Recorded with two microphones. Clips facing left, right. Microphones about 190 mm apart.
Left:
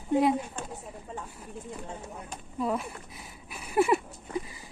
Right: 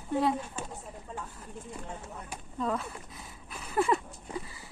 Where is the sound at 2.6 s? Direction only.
10° left (ahead or behind).